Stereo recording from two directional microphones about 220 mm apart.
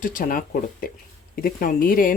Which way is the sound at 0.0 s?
40° left (ahead or behind).